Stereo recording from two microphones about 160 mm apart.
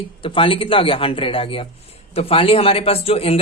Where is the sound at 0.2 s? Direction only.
35° left (ahead or behind).